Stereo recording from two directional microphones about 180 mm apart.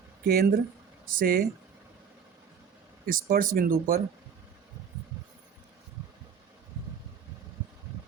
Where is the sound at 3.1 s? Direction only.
50° right (ahead or behind).